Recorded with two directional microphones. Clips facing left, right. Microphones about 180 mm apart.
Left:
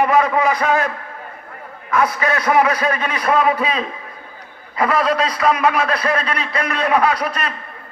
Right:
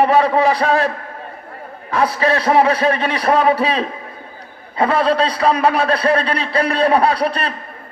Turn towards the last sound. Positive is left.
turn(degrees=-30)  # may be behind; listen again after turning